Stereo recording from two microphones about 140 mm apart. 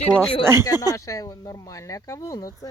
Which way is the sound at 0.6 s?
25° left (ahead or behind).